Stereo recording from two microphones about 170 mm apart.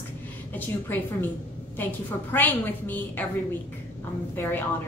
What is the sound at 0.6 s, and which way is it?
A woman's voice, 10° left (ahead or behind).